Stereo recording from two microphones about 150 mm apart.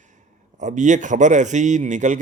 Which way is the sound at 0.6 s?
55° right (ahead or behind).